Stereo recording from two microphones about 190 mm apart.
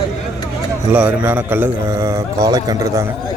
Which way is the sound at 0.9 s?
10° right (ahead or behind).